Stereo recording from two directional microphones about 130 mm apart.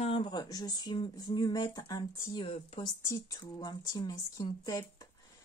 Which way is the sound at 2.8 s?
25° left (ahead or behind).